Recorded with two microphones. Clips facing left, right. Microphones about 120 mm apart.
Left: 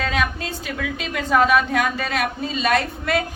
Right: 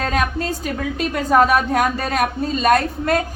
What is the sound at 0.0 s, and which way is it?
A woman's voice, 45° right (ahead or behind).